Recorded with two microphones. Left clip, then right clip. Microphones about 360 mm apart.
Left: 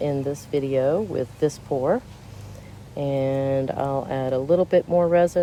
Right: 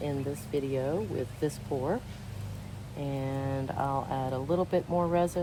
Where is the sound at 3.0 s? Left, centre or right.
Left.